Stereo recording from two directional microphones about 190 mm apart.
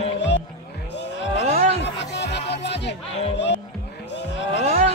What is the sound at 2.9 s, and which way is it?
Speech, 65° left (ahead or behind).